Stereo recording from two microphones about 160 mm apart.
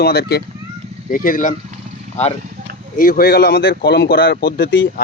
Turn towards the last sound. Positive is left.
turn(degrees=65)  # may be behind; listen again after turning